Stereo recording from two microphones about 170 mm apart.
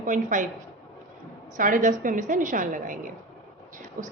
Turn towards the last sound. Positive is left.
turn(degrees=-50)  # may be behind; listen again after turning